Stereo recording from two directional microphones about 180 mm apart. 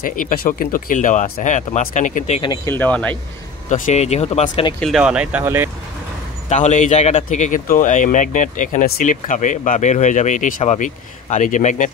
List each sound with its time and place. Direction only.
0.0 s speech: 50° left (ahead or behind)
2.4 s speech: 20° left (ahead or behind)
3.6 s speech: 45° left (ahead or behind)
4.7 s speech: centre (ahead or behind)
6.5 s speech: 40° left (ahead or behind)